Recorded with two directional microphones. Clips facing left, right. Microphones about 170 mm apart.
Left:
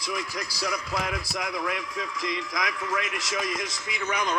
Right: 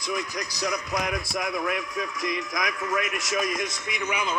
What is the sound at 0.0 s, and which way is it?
A man's voice, 20° right (ahead or behind).